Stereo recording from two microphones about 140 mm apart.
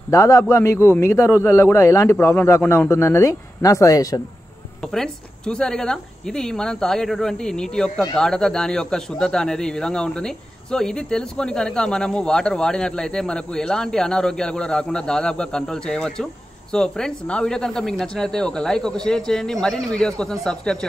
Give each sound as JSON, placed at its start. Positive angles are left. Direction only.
{"t": 0.1, "sound": "a man's voice", "side_deg": 20}
{"t": 4.9, "sound": "a man's voice", "side_deg": 5}